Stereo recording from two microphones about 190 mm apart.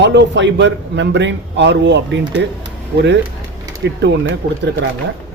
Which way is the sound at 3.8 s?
70° right (ahead or behind).